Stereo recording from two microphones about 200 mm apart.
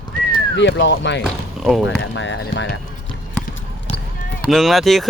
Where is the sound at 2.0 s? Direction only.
65° left (ahead or behind).